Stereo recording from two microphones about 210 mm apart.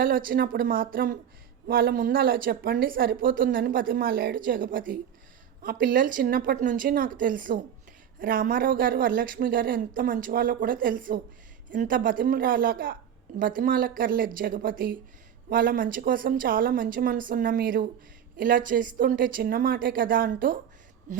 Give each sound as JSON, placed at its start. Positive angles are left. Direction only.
{"t": 0.0, "sound": "a woman's voice", "side_deg": -45}